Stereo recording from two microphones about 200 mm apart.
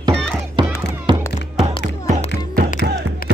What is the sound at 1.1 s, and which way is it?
Music, 25° right (ahead or behind).